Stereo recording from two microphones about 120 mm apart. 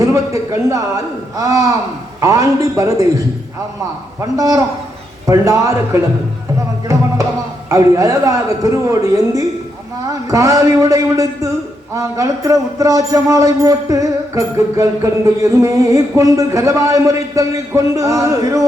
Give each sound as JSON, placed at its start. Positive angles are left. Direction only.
{"t": 0.0, "sound": "a man's voice", "side_deg": -25}
{"t": 7.7, "sound": "speech", "side_deg": -25}